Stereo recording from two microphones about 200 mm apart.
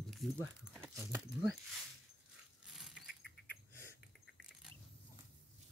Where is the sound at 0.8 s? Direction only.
15° right (ahead or behind).